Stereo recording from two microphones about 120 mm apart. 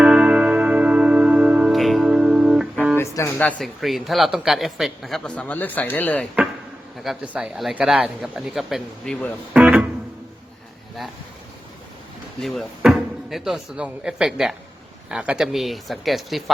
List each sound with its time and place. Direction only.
0.0 s music: 10° right (ahead or behind)
1.7 s music: centre (ahead or behind)
3.0 s music: 20° left (ahead or behind)
3.3 s speech: 10° left (ahead or behind)
3.8 s a man's voice: centre (ahead or behind)
7.0 s a man's voice: 5° right (ahead or behind)
9.5 s music: 10° right (ahead or behind)
12.4 s a man's voice: centre (ahead or behind)